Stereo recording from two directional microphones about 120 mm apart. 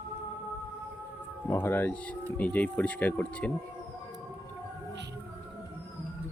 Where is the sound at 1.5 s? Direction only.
20° left (ahead or behind).